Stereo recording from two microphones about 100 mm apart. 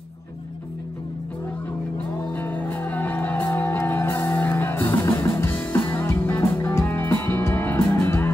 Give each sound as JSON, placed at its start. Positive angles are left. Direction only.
{"t": 2.1, "sound": "music", "side_deg": 20}